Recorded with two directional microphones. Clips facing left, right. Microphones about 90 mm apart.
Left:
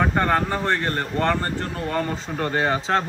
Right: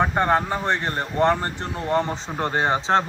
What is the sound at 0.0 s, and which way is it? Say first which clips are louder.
Speech: right 1 dB; 20° right (ahead or behind).